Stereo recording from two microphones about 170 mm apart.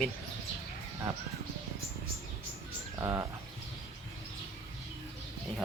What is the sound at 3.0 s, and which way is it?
Speech, 20° right (ahead or behind).